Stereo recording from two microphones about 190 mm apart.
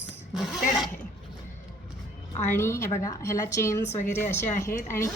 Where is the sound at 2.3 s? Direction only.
10° left (ahead or behind).